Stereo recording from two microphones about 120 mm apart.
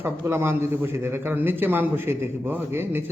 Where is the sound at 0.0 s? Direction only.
20° right (ahead or behind).